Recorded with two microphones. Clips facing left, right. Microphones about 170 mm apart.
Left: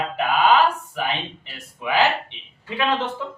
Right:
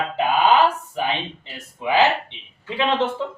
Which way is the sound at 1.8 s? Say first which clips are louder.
Right 3 dB; 25° right (ahead or behind).